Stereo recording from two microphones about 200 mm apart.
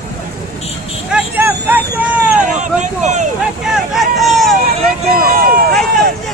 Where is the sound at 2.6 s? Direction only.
35° right (ahead or behind).